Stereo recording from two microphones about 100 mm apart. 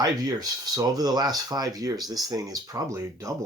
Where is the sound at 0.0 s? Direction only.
40° right (ahead or behind).